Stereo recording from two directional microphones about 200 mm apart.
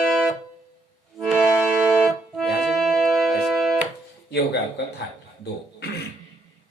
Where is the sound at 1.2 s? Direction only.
Centre (ahead or behind).